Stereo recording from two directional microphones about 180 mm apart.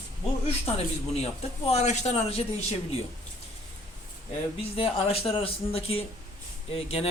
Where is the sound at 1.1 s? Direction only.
35° left (ahead or behind).